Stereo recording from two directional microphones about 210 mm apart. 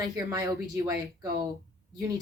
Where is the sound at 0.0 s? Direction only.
15° right (ahead or behind).